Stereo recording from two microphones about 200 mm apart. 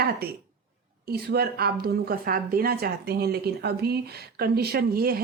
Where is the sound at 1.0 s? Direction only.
50° right (ahead or behind).